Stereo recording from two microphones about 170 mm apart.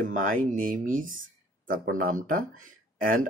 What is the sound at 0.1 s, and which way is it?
Speech, 50° right (ahead or behind).